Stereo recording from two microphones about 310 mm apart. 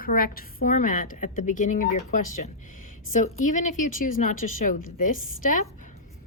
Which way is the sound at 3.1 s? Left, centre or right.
Left.